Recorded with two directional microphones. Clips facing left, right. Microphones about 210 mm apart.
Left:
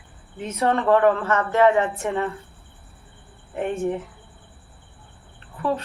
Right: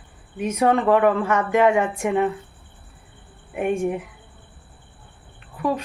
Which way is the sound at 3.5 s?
15° right (ahead or behind).